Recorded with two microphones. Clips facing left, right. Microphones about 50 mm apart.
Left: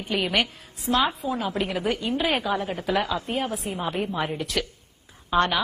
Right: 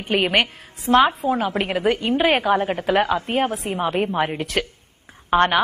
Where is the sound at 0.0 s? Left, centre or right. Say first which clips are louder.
Right 5 dB; right.